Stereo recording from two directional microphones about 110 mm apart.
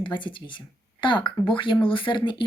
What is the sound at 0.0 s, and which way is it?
Speech, 45° left (ahead or behind).